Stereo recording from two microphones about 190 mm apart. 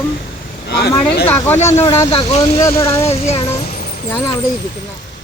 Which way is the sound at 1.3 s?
10° left (ahead or behind).